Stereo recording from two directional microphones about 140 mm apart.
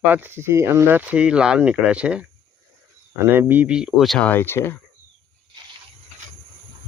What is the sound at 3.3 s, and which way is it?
Speech, 15° right (ahead or behind).